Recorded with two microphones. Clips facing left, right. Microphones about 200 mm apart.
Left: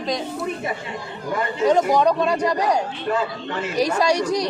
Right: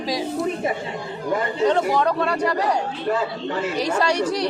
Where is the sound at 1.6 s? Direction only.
15° left (ahead or behind).